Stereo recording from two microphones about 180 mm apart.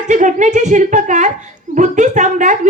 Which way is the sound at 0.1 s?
45° right (ahead or behind).